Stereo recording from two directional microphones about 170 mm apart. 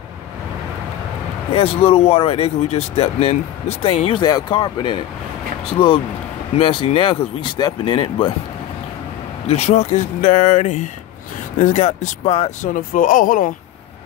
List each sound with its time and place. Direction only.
1.5 s speech: 35° left (ahead or behind)
9.5 s speech: 40° left (ahead or behind)
12.7 s speech: 55° left (ahead or behind)